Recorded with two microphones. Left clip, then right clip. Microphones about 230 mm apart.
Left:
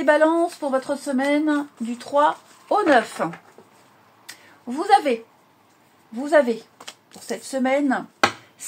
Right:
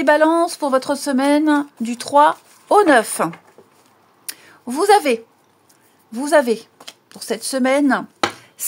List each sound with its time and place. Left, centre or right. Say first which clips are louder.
0.0 s speech: right 3 dB; right
4.3 s a sound: right 5 dB; right
6.1 s speech: right 3 dB; right